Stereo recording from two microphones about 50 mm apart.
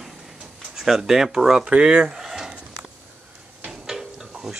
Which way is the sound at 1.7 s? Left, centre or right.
Centre.